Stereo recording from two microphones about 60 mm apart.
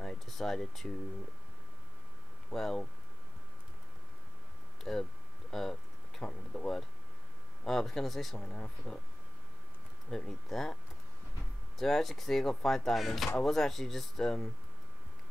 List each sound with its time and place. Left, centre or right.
0.0 s speech: centre
2.5 s speech: centre
4.9 s speech: centre
5.5 s a sound: centre
6.2 s speech: centre
7.6 s speech: centre
8.4 s speech: centre
10.0 s speech: centre
11.8 s speech: centre